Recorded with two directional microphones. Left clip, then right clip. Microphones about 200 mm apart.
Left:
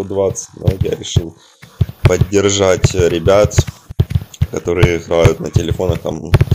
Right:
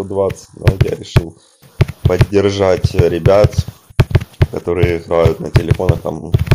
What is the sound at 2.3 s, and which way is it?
Speech, 5° left (ahead or behind).